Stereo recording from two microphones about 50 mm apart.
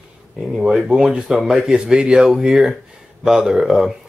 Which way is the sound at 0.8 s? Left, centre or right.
Centre.